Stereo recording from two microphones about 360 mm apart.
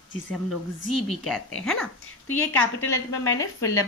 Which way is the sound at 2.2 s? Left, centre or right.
Left.